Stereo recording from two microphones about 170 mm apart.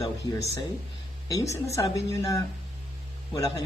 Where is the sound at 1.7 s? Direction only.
20° left (ahead or behind).